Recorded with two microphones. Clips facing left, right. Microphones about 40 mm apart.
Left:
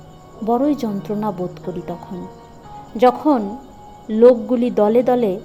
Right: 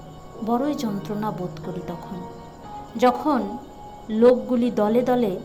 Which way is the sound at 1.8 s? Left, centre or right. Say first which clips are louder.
Left 4 dB; centre.